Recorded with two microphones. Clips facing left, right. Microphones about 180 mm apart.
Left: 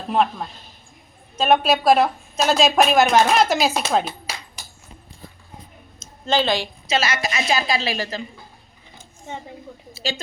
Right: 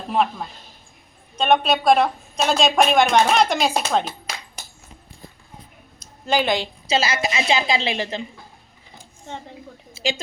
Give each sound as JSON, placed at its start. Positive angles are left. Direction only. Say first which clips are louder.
{"t": 0.1, "sound": "a woman's voice", "louder": "left 1 dB", "side_deg": 0}
{"t": 6.0, "sound": "a woman's voice", "louder": "even", "side_deg": -10}